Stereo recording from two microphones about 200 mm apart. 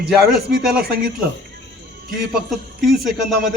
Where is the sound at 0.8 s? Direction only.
50° right (ahead or behind).